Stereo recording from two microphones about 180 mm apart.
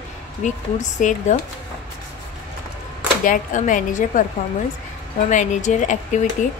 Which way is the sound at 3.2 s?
45° left (ahead or behind).